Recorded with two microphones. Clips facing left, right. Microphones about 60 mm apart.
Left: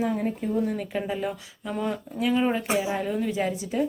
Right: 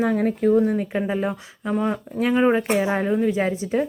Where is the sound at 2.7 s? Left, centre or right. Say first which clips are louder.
Right 5 dB; right.